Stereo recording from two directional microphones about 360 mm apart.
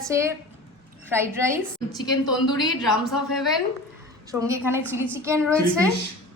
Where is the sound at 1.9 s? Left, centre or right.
Left.